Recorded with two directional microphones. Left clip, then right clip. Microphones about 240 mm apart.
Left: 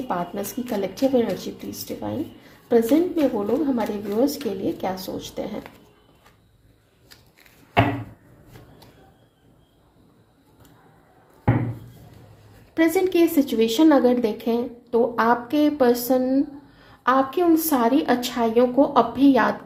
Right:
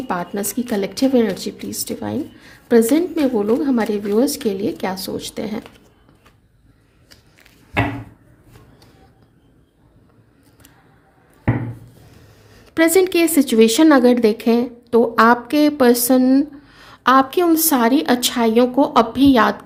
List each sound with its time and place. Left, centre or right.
0.1 s speech: right
12.7 s speech: right